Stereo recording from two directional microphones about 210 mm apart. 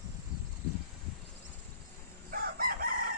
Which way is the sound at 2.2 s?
45° right (ahead or behind).